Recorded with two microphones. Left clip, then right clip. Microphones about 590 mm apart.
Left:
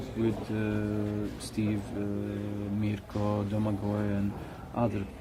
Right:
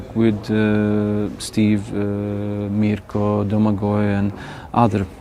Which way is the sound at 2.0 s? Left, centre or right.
Right.